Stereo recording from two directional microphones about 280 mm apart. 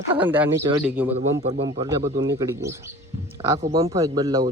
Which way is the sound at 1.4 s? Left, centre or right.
Right.